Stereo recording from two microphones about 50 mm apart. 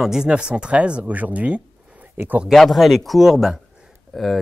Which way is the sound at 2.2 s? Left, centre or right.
Right.